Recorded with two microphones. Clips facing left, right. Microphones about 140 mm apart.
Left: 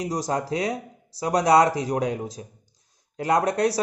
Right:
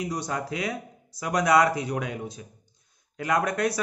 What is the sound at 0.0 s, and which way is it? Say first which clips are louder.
Speech: left 4 dB; 35° left (ahead or behind).